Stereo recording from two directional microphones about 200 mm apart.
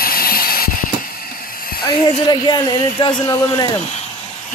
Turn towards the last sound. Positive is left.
turn(degrees=20)  # may be behind; listen again after turning